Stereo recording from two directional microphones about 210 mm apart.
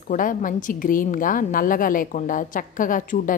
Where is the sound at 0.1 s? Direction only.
40° left (ahead or behind).